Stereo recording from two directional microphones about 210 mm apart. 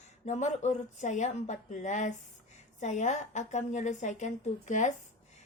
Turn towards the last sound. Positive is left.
turn(degrees=35)  # may be behind; listen again after turning